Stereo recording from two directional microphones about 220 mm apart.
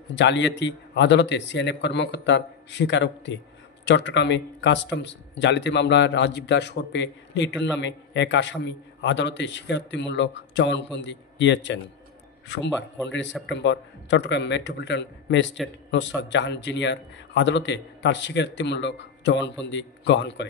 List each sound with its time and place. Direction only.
0.1 s speech: 55° left (ahead or behind)